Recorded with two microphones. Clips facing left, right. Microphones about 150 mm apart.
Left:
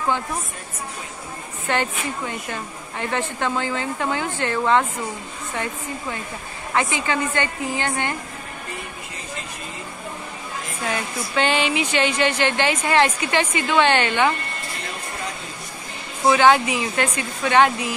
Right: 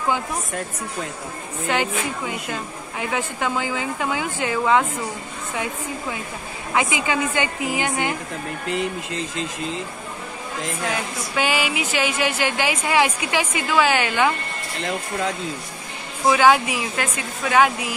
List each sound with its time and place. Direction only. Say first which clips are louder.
1.7 s speech: even; 5° right (ahead or behind)
8.6 s speech: right 9 dB; 85° right
11.3 s speech: left 2 dB; 5° right (ahead or behind)
16.3 s speech: even; 10° right (ahead or behind)